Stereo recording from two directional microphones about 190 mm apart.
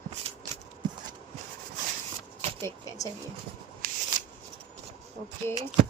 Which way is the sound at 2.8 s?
15° left (ahead or behind).